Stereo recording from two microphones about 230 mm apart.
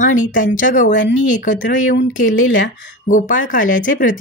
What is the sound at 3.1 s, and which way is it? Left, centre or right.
A woman's voice, left.